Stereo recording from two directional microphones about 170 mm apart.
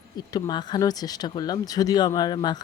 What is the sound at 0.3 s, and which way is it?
Speech, 25° left (ahead or behind).